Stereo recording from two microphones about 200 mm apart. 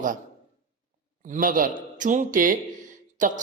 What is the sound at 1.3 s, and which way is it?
Speech, 45° right (ahead or behind).